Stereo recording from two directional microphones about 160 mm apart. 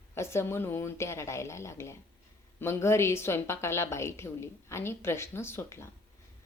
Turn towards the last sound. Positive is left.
turn(degrees=15)  # may be behind; listen again after turning